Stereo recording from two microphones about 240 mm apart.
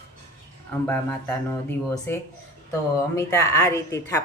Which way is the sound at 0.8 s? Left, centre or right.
Centre.